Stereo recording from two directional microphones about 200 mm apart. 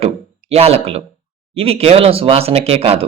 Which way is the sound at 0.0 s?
30° right (ahead or behind).